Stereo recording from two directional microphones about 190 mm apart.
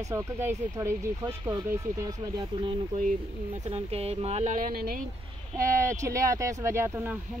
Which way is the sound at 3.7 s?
35° right (ahead or behind).